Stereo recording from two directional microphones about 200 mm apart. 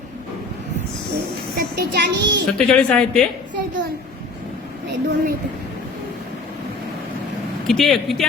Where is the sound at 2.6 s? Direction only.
5° left (ahead or behind).